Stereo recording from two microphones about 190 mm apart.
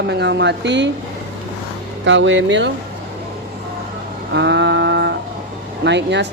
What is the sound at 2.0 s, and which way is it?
Speech, 80° right.